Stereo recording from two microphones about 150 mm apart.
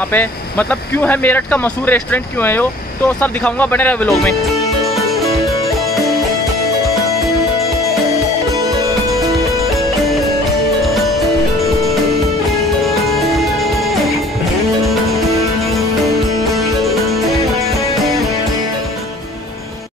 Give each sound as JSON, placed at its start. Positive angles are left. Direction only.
{"t": 0.1, "sound": "speech", "side_deg": 10}
{"t": 12.8, "sound": "music", "side_deg": 0}
{"t": 16.5, "sound": "music", "side_deg": 0}